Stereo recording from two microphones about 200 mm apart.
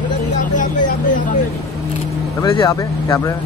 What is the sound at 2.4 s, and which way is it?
Speech, 20° left (ahead or behind).